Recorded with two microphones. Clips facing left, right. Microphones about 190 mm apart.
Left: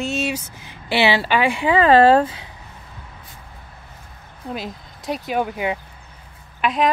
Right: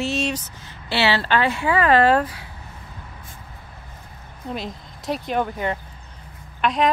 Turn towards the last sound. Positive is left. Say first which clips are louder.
# left 1 dB
turn(degrees=5)  # may be behind; listen again after turning